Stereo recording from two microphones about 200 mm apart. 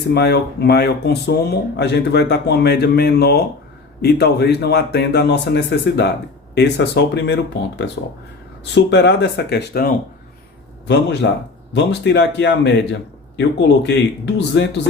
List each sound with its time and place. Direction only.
0.1 s speech: 55° left (ahead or behind)